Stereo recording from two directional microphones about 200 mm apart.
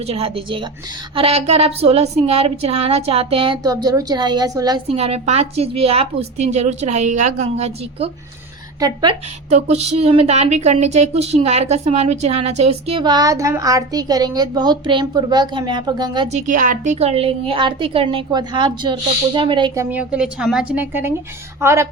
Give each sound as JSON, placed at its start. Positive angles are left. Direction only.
{"t": 0.1, "sound": "a woman's voice", "side_deg": -30}
{"t": 4.9, "sound": "a woman's voice", "side_deg": -30}
{"t": 9.5, "sound": "a woman's voice", "side_deg": -35}
{"t": 16.5, "sound": "a woman's voice", "side_deg": -40}